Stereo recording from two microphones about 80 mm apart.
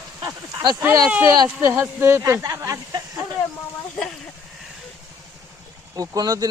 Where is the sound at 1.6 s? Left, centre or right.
Right.